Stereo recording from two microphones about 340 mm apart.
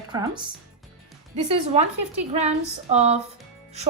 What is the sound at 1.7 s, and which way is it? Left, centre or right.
Speech, centre.